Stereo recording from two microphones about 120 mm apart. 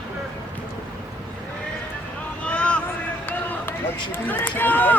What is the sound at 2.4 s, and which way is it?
Vehicle, 10° left (ahead or behind).